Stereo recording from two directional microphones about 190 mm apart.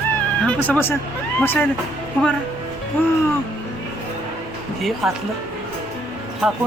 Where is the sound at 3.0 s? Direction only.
10° left (ahead or behind).